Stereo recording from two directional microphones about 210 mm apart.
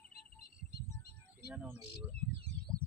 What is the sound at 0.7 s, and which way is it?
Music, 50° left (ahead or behind).